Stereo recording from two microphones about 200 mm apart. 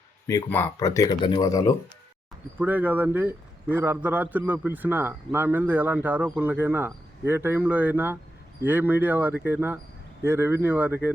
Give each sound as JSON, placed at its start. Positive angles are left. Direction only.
{"t": 0.3, "sound": "speech", "side_deg": 15}
{"t": 2.6, "sound": "a man's voice", "side_deg": -10}